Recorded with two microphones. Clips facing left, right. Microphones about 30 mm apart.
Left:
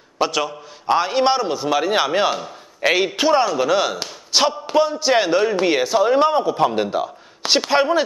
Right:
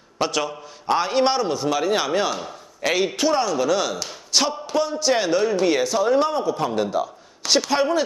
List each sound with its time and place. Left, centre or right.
0.2 s a man's voice: centre